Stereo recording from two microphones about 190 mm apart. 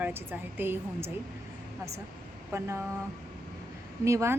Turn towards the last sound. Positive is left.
turn(degrees=-15)  # may be behind; listen again after turning